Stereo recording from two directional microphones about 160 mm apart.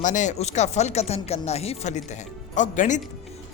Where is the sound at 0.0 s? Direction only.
50° left (ahead or behind).